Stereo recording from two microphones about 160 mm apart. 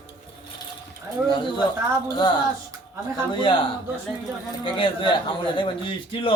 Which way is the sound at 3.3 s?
30° left (ahead or behind).